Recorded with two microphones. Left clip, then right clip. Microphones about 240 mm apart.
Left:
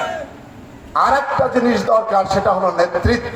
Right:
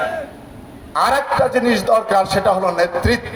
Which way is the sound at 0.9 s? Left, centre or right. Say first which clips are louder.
Left 1 dB; right.